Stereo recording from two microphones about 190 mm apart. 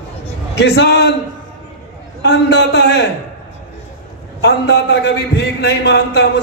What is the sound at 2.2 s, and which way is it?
Speech, 65° left (ahead or behind).